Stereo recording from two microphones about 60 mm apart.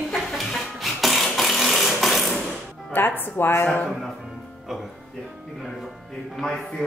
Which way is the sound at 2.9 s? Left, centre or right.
Left.